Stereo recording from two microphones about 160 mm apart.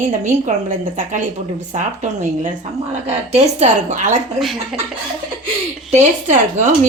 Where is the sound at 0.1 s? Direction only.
50° right (ahead or behind).